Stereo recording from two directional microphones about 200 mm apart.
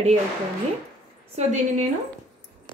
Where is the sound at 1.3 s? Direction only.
35° right (ahead or behind).